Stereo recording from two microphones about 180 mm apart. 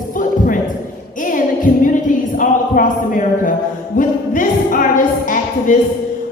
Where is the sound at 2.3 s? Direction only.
45° left (ahead or behind).